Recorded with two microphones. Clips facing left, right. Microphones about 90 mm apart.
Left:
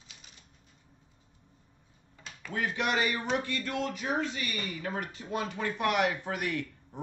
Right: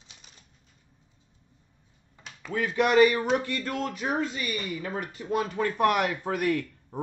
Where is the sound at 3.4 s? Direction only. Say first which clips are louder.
Right 2 dB; 40° right (ahead or behind).